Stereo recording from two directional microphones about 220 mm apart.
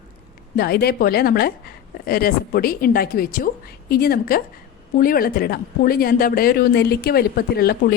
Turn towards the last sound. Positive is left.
turn(degrees=45)  # may be behind; listen again after turning